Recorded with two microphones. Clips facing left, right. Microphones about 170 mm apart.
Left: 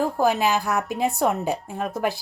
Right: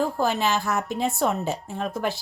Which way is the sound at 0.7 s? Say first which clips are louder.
Left 2 dB; 5° left (ahead or behind).